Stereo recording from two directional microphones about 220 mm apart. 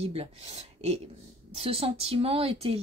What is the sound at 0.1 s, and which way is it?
Speech, 25° right (ahead or behind).